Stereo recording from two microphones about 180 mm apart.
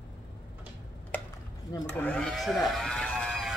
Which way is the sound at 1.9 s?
5° left (ahead or behind).